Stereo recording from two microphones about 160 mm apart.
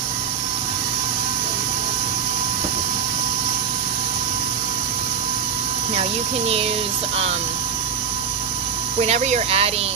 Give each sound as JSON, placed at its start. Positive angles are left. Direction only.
{"t": 9.0, "sound": "speech", "side_deg": -40}